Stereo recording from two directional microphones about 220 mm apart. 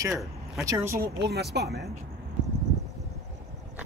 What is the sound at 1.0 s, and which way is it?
Speech, 45° right (ahead or behind).